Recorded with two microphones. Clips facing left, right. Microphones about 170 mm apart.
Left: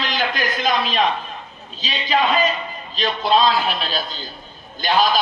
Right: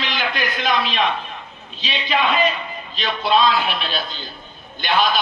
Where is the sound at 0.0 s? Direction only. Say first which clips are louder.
Left 1 dB; 40° left (ahead or behind).